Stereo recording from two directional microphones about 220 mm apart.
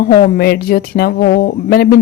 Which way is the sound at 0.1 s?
45° left (ahead or behind).